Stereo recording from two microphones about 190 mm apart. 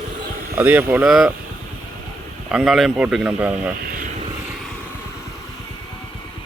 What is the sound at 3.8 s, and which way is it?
Speech, 50° right (ahead or behind).